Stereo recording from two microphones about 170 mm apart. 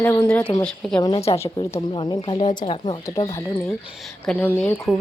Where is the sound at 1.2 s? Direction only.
35° left (ahead or behind).